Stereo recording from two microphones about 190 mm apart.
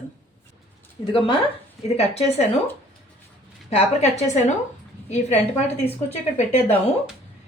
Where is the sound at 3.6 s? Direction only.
35° left (ahead or behind).